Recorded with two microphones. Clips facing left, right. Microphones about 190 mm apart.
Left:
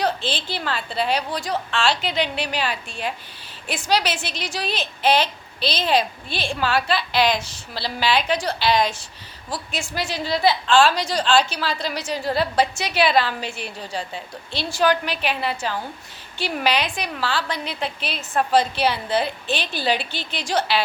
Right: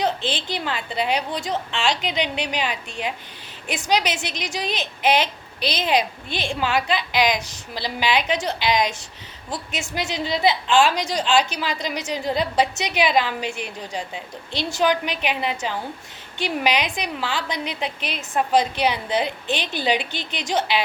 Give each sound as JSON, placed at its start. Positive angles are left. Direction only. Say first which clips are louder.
{"t": 0.0, "sound": "a woman's voice", "louder": "even", "side_deg": -20}